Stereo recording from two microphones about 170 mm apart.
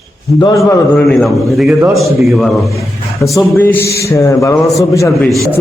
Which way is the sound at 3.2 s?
15° left (ahead or behind).